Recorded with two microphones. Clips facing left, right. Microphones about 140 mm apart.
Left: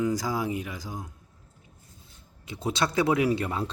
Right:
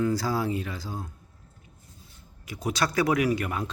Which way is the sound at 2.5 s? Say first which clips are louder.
Even; 25° left (ahead or behind).